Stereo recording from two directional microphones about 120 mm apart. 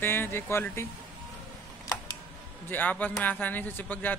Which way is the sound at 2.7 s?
15° left (ahead or behind).